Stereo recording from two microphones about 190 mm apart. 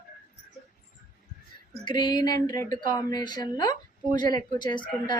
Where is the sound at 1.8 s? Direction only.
20° left (ahead or behind).